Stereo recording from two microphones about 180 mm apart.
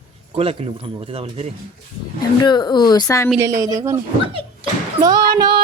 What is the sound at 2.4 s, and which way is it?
Speech, 25° left (ahead or behind).